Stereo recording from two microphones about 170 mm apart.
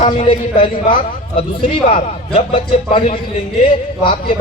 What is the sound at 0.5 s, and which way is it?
A man's voice, 30° left (ahead or behind).